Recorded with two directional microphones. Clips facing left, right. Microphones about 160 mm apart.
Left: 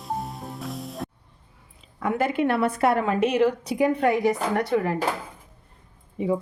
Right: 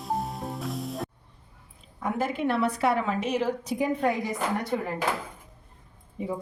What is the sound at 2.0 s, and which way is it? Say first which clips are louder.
A woman's voice: left 4 dB; 65° left (ahead or behind).